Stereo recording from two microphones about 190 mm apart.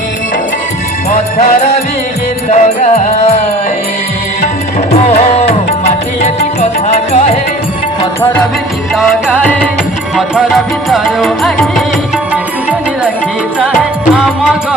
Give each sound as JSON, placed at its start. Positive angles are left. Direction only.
{"t": 1.1, "sound": "music", "side_deg": 40}
{"t": 5.0, "sound": "music", "side_deg": 35}
{"t": 9.0, "sound": "music", "side_deg": -5}